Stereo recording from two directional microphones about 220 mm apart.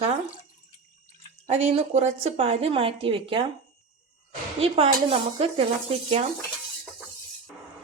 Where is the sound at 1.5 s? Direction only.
30° right (ahead or behind).